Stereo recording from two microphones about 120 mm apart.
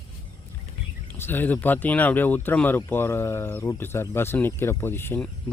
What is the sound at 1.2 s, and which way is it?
Speech, 15° left (ahead or behind).